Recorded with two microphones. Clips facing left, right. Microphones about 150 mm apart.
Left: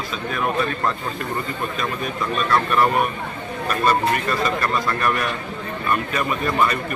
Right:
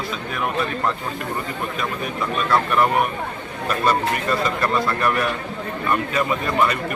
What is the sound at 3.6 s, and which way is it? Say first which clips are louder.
A man's voice: left 1 dB; 20° right (ahead or behind).